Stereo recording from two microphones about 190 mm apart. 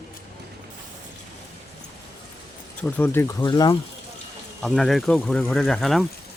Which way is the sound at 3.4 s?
25° left (ahead or behind).